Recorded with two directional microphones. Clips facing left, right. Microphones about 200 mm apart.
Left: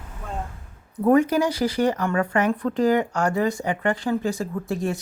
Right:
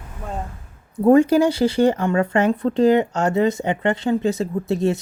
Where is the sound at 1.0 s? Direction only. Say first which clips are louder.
Right 5 dB; 30° right (ahead or behind).